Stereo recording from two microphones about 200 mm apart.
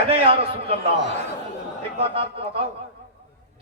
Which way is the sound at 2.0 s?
30° right (ahead or behind).